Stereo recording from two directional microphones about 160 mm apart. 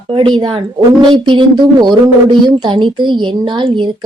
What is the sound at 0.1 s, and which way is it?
A woman's voice, 30° right (ahead or behind).